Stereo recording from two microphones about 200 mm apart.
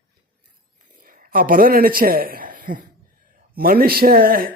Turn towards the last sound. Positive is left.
turn(degrees=-45)  # may be behind; listen again after turning